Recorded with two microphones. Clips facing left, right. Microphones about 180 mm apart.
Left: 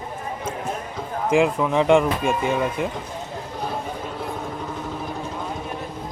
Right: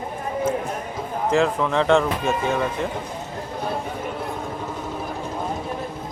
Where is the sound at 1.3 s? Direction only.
10° left (ahead or behind).